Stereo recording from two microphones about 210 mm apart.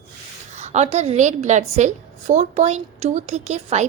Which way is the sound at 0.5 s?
35° right (ahead or behind).